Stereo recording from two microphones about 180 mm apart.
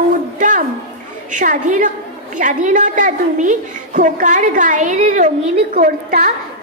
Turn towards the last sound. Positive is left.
turn(degrees=-45)  # may be behind; listen again after turning